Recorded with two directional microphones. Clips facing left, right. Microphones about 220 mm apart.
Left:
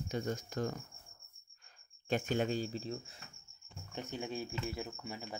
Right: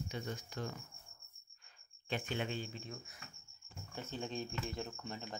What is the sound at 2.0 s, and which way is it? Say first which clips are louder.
Speech: left 6 dB; 45° left (ahead or behind).